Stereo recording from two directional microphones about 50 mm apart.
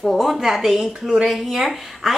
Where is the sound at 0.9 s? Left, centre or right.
Centre.